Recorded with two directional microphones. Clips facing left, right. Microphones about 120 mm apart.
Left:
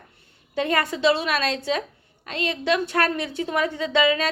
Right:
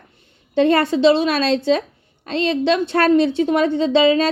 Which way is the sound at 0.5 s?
30° right (ahead or behind).